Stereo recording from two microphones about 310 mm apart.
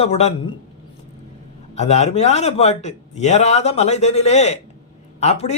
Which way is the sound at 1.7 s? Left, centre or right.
Left.